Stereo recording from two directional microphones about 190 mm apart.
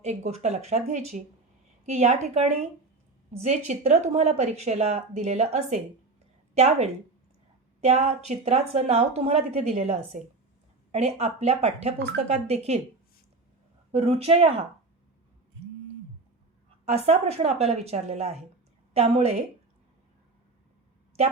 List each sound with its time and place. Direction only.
0.0 s a woman's voice: 35° right (ahead or behind)
13.9 s speech: 35° right (ahead or behind)
17.1 s speech: 35° right (ahead or behind)